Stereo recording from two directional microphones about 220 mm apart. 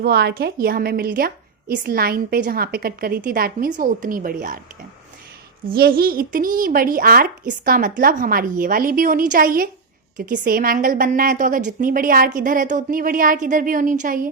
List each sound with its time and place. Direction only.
0.0 s a woman's voice: 45° right (ahead or behind)
5.6 s a woman's voice: 40° right (ahead or behind)